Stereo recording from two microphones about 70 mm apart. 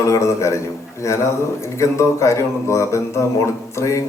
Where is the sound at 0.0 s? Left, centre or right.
Left.